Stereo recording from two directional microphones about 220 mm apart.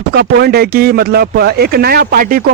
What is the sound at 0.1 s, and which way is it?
Speech, 45° right (ahead or behind).